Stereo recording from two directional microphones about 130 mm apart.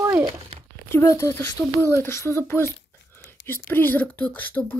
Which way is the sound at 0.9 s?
20° left (ahead or behind).